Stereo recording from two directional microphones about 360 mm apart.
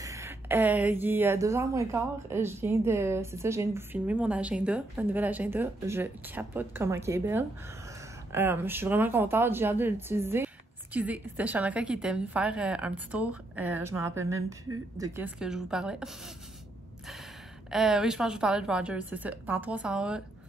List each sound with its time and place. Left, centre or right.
0.0 s a woman's voice: centre
17.6 s speech: centre